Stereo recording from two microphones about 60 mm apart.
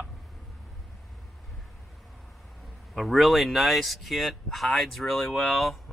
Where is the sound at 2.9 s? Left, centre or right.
Centre.